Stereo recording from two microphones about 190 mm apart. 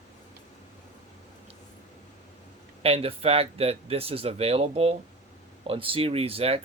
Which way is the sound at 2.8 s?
30° right (ahead or behind).